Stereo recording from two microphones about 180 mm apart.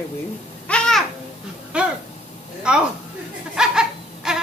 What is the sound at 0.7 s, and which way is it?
Babbling, 5° left (ahead or behind).